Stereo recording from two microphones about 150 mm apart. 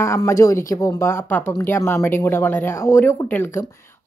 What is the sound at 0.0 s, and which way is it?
Speech, 20° left (ahead or behind).